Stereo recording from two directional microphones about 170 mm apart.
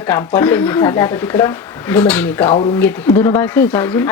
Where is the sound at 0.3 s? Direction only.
10° left (ahead or behind).